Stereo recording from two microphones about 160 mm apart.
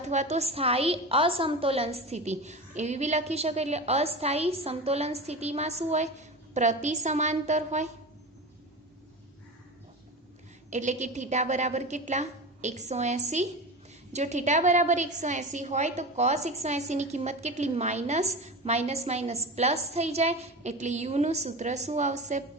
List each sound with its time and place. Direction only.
0.1 s a woman's voice: 45° right (ahead or behind)
10.7 s a woman's voice: 50° right (ahead or behind)